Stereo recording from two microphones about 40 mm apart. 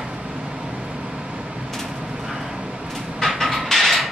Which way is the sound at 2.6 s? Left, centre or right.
Right.